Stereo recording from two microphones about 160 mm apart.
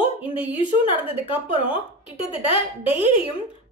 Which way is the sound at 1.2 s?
35° left (ahead or behind).